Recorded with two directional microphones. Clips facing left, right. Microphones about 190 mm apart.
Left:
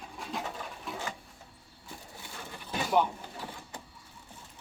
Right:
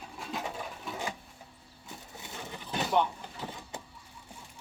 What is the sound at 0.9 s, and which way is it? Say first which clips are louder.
Sewing machine: left 1 dB; centre (ahead or behind).